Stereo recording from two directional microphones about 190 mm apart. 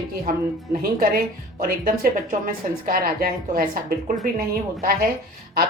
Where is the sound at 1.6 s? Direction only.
50° right (ahead or behind).